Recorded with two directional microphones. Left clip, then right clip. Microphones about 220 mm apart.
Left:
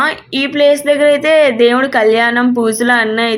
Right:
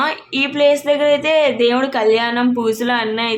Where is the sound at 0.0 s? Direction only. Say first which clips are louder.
Left 3 dB; 20° left (ahead or behind).